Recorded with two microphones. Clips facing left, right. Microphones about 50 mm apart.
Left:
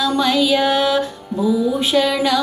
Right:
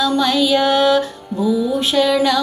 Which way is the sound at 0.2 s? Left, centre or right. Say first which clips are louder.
Left 1 dB; left.